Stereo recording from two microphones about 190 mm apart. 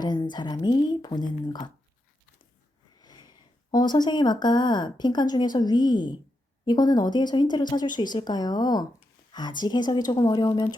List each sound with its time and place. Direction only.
0.0 s speech: 20° left (ahead or behind)
3.0 s speech: 20° left (ahead or behind)